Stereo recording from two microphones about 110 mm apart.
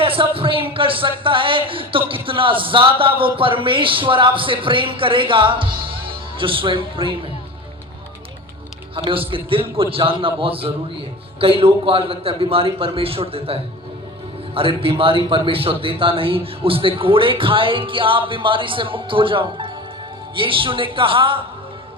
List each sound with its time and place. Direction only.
0.0 s a sound: 55° right (ahead or behind)
0.7 s speech: 55° right (ahead or behind)
9.0 s a man's voice: 55° right (ahead or behind)